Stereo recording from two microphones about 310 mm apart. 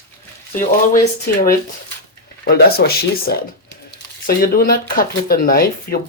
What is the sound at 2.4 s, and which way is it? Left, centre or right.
Speech, left.